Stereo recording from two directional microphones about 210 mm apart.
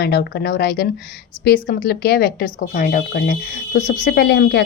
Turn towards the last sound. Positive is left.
turn(degrees=50)  # may be behind; listen again after turning